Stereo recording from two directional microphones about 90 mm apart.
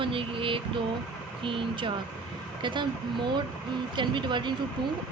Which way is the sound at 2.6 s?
60° right (ahead or behind).